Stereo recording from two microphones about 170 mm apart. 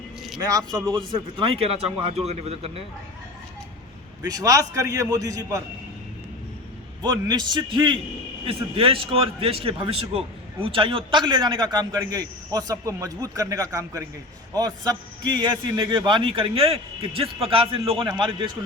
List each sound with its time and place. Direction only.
0.3 s a man's voice: 25° right (ahead or behind)
4.2 s a man's voice: 20° right (ahead or behind)
7.0 s a man's voice: 25° right (ahead or behind)